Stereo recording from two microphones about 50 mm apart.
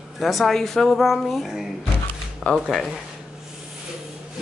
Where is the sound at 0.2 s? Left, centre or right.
Centre.